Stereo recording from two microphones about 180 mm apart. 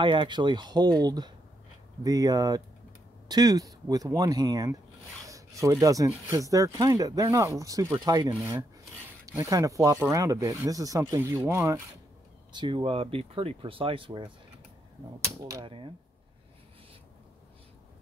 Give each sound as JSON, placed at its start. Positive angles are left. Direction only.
{"t": 0.0, "sound": "speech", "side_deg": -25}
{"t": 12.5, "sound": "speech", "side_deg": -25}
{"t": 15.4, "sound": "speech", "side_deg": -25}